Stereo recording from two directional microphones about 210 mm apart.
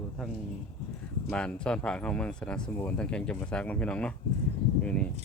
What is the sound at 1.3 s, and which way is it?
Speech, 5° left (ahead or behind).